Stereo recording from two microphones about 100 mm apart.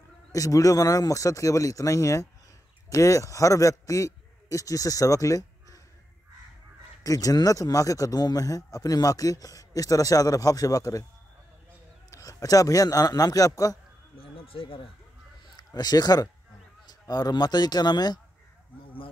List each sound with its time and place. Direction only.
0.3 s a man's voice: 35° left (ahead or behind)
7.0 s speech: 35° left (ahead or behind)
12.1 s a man's voice: 35° left (ahead or behind)
14.1 s speech: 65° left (ahead or behind)
15.5 s a man's voice: 45° left (ahead or behind)